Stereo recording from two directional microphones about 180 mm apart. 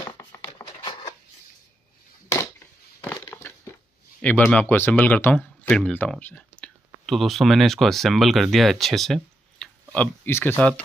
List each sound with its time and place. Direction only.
0.2 s a sound: 20° left (ahead or behind)
3.2 s crushing: 15° left (ahead or behind)
4.2 s speech: 10° left (ahead or behind)